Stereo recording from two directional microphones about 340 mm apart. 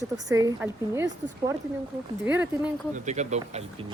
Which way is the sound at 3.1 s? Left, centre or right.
Centre.